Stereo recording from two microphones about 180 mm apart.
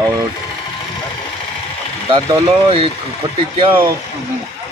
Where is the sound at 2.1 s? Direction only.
25° right (ahead or behind).